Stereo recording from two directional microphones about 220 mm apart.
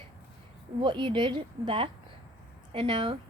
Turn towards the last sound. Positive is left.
turn(degrees=-20)  # may be behind; listen again after turning